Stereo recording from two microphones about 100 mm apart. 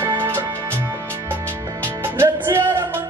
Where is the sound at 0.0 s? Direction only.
25° right (ahead or behind).